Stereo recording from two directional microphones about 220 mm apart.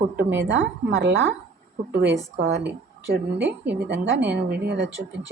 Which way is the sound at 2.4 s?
50° right (ahead or behind).